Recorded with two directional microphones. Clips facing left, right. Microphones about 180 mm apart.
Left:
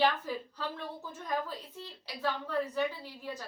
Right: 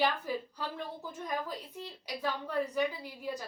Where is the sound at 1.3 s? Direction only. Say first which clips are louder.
Left 3 dB; 15° right (ahead or behind).